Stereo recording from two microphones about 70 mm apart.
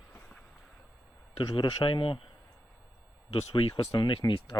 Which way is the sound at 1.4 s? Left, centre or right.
Left.